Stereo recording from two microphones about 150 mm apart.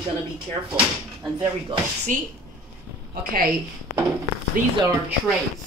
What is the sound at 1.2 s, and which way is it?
Speech, 25° right (ahead or behind).